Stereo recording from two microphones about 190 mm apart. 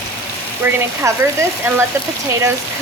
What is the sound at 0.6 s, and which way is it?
Speech, 10° right (ahead or behind).